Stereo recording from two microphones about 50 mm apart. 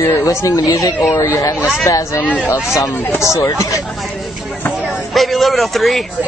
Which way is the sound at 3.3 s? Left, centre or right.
Left.